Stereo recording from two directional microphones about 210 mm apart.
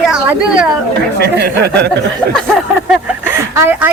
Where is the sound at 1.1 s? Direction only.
50° right (ahead or behind).